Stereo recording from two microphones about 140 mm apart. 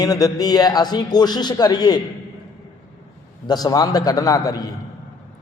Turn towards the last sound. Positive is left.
turn(degrees=25)  # may be behind; listen again after turning